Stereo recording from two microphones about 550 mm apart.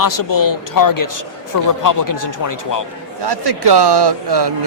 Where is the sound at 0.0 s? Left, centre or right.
Left.